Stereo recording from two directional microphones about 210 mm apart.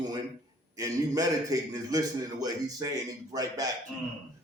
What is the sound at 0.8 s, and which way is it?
A man's voice, 15° right (ahead or behind).